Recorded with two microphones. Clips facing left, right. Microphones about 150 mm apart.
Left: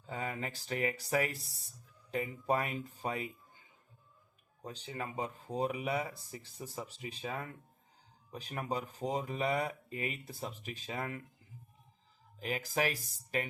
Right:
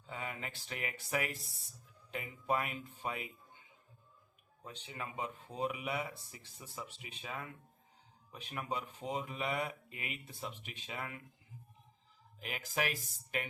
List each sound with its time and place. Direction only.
0.1 s speech: 40° left (ahead or behind)
4.6 s speech: 35° left (ahead or behind)
12.4 s speech: 35° left (ahead or behind)